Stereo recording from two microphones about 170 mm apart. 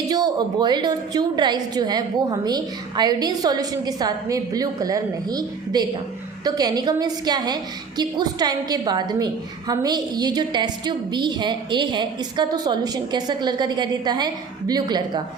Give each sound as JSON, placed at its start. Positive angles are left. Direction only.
{"t": 0.1, "sound": "a woman's voice", "side_deg": -25}